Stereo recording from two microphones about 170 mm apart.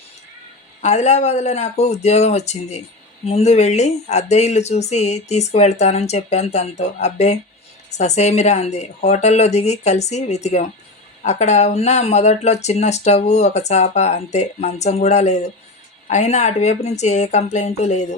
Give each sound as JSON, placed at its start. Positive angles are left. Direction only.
{"t": 0.8, "sound": "speech", "side_deg": 40}